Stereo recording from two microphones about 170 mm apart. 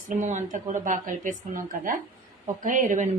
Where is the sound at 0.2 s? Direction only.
45° right (ahead or behind).